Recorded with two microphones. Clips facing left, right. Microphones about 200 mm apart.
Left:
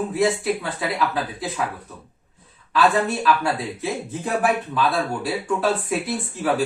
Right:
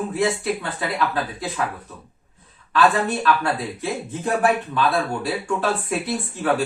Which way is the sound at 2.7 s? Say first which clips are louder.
Even; centre (ahead or behind).